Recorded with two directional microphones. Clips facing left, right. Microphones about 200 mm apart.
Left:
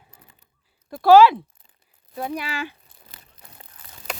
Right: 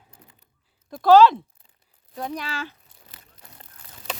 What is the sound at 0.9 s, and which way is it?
Speech, 5° left (ahead or behind).